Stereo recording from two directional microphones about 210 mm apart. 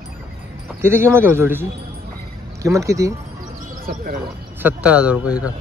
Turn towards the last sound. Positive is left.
turn(degrees=-5)  # may be behind; listen again after turning